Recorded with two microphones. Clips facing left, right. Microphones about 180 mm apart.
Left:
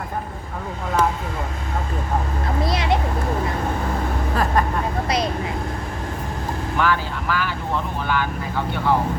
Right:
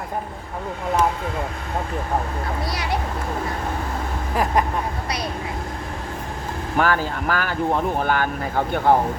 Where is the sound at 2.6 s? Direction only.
20° left (ahead or behind).